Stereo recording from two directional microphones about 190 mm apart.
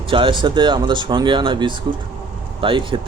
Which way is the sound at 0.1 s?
25° right (ahead or behind).